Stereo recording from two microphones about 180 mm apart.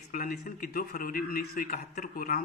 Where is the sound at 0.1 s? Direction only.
50° left (ahead or behind).